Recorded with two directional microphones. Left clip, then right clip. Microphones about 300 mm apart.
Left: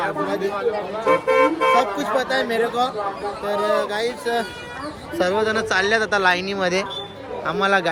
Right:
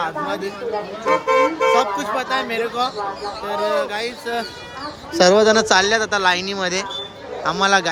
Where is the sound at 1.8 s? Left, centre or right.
Centre.